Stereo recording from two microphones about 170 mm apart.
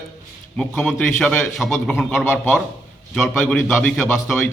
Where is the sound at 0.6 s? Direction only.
Centre (ahead or behind).